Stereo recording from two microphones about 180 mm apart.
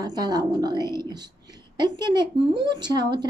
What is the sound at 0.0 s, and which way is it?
Speech, 20° right (ahead or behind).